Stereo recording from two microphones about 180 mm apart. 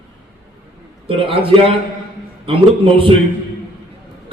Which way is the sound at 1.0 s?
30° right (ahead or behind).